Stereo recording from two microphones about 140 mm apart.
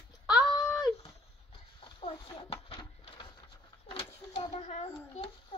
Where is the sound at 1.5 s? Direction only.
40° left (ahead or behind).